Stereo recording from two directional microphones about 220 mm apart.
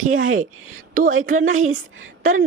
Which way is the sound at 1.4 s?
65° right (ahead or behind).